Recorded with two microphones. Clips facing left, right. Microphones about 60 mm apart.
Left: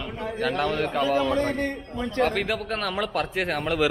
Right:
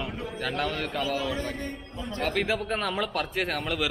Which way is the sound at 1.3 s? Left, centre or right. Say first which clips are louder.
Left 8 dB; left.